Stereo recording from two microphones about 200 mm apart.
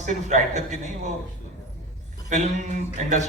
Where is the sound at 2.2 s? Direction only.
35° right (ahead or behind).